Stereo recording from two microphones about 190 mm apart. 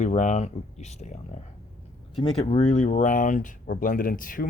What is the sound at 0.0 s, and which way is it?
Speech, 40° left (ahead or behind).